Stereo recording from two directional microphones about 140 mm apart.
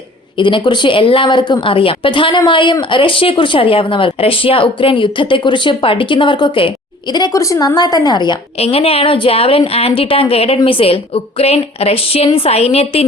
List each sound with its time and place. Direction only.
0.3 s speech: 35° left (ahead or behind)
8.5 s a woman's voice: 45° left (ahead or behind)